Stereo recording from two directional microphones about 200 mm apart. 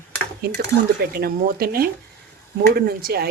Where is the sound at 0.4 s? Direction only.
50° right (ahead or behind).